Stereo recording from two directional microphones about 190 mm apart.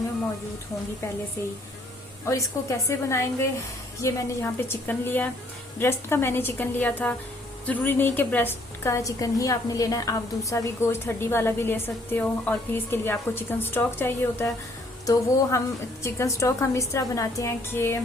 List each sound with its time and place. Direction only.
2.2 s a woman's voice: 15° left (ahead or behind)